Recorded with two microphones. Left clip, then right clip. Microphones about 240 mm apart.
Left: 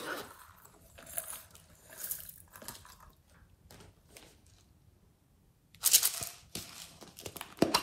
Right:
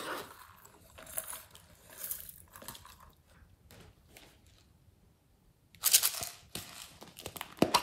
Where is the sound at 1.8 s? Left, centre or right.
Centre.